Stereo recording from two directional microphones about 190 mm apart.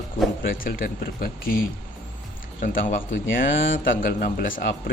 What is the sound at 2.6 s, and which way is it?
Speech, 45° left (ahead or behind).